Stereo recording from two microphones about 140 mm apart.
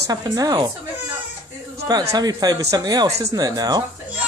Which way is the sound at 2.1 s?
25° right (ahead or behind).